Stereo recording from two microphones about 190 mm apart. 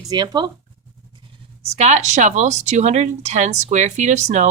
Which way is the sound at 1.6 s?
35° right (ahead or behind).